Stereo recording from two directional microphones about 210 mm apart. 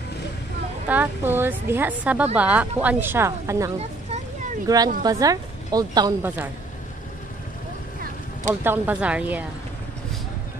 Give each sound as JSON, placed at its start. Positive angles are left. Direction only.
{"t": 0.8, "sound": "a woman's voice", "side_deg": -10}
{"t": 8.5, "sound": "a woman's voice", "side_deg": -10}